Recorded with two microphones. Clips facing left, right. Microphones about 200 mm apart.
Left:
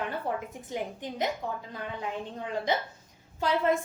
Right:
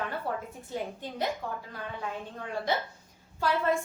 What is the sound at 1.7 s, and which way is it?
A woman's voice, 20° left (ahead or behind).